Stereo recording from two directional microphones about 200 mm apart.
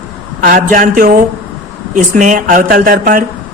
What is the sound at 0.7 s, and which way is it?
Speech, 40° right (ahead or behind).